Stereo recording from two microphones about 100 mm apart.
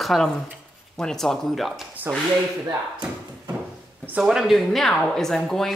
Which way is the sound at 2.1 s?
25° right (ahead or behind).